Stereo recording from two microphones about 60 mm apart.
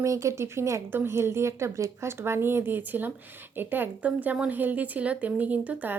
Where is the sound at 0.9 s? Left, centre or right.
Right.